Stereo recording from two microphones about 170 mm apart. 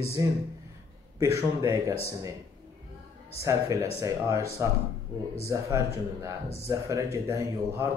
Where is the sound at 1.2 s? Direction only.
15° right (ahead or behind).